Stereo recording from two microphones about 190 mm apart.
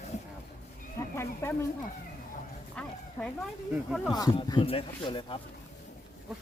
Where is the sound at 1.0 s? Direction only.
15° left (ahead or behind).